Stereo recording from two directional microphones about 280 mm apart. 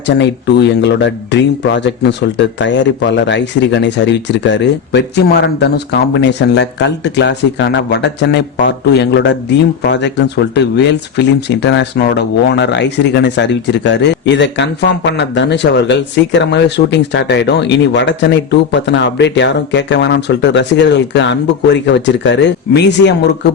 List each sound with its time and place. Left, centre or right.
0.2 s speech: left